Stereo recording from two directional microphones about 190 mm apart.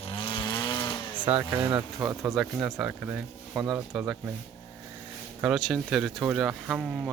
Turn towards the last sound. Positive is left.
turn(degrees=-5)  # may be behind; listen again after turning